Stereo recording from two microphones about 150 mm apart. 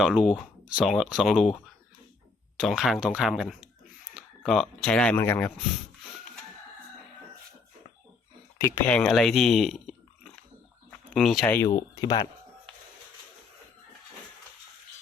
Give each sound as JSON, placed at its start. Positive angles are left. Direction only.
{"t": 0.0, "sound": "speech", "side_deg": -5}
{"t": 2.6, "sound": "speech", "side_deg": -5}
{"t": 8.5, "sound": "speech", "side_deg": 15}
{"t": 11.1, "sound": "speech", "side_deg": 0}
{"t": 11.4, "sound": "speech", "side_deg": 15}
{"t": 11.7, "sound": "speech", "side_deg": 25}